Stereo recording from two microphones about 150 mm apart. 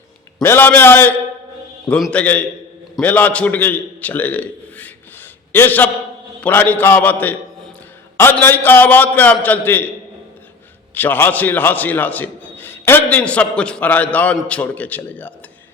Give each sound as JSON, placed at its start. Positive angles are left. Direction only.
{"t": 0.4, "sound": "a man's voice", "side_deg": 15}
{"t": 10.9, "sound": "a man's voice", "side_deg": 15}